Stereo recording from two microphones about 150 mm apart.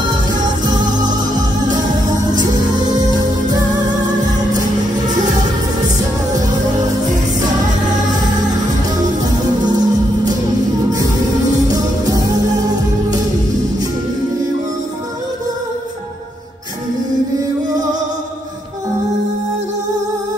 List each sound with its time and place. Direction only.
0.1 s music: 30° right (ahead or behind)
3.0 s music: 25° right (ahead or behind)
9.2 s music: 25° right (ahead or behind)
11.5 s music: 25° right (ahead or behind)